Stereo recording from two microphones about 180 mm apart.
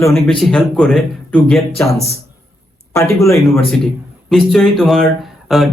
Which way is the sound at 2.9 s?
15° left (ahead or behind).